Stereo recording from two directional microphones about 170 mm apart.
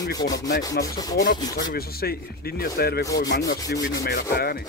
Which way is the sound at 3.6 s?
20° left (ahead or behind).